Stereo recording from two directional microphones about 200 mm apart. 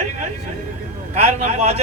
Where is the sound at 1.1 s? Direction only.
35° right (ahead or behind).